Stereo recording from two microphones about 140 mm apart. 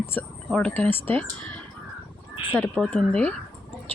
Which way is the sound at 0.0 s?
15° left (ahead or behind).